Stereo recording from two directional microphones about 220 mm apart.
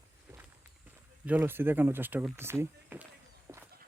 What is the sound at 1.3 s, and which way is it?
Speech, 10° right (ahead or behind).